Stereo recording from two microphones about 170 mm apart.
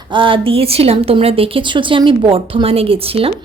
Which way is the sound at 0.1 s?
30° right (ahead or behind).